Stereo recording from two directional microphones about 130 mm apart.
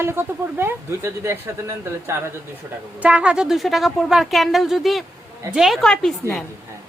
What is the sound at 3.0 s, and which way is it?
A woman's voice, 10° right (ahead or behind).